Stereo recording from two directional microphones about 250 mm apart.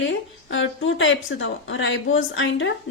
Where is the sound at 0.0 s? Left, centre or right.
Left.